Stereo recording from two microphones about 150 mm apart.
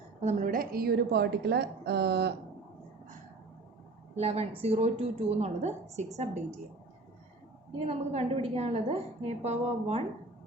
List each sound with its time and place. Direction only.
0.2 s a woman's voice: 50° right (ahead or behind)
0.4 s a woman's voice: 70° right (ahead or behind); by 2.3 s 90° right
4.1 s a woman's voice: 45° right (ahead or behind)
7.9 s a woman's voice: 45° right (ahead or behind)